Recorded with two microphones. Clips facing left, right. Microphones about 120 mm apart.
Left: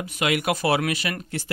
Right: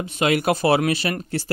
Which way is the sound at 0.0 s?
30° right (ahead or behind).